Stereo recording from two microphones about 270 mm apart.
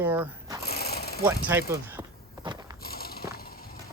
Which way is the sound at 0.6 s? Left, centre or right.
Left.